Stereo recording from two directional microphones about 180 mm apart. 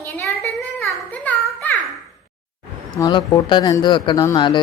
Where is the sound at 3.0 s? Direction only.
20° left (ahead or behind).